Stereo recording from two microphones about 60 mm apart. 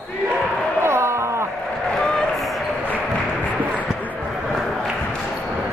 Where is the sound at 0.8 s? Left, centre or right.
Right.